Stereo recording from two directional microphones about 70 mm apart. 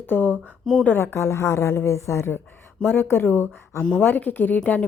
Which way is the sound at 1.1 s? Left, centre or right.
Left.